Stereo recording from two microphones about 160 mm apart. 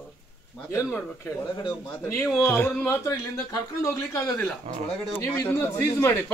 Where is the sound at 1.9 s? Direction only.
20° left (ahead or behind).